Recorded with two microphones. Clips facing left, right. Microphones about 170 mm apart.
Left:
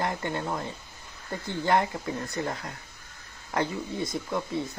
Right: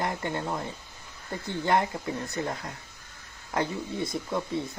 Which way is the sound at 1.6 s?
20° right (ahead or behind).